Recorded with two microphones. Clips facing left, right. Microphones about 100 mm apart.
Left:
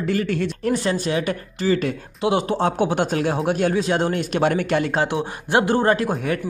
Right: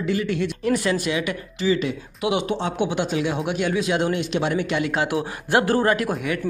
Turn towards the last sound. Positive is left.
turn(degrees=35)  # may be behind; listen again after turning